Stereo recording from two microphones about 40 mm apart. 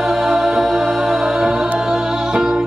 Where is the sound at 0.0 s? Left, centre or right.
Centre.